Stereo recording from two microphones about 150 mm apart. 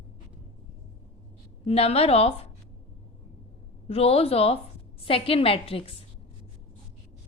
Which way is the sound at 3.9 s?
40° left (ahead or behind).